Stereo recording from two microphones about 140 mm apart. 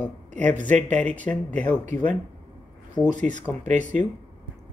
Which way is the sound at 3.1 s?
60° right (ahead or behind).